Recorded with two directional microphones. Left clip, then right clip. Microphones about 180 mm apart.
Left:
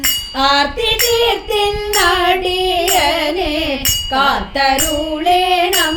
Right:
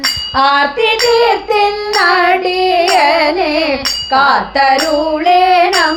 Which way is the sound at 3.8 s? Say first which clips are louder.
Right 2 dB; 10° left (ahead or behind).